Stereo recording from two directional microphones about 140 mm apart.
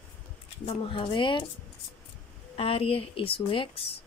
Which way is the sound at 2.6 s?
40° left (ahead or behind).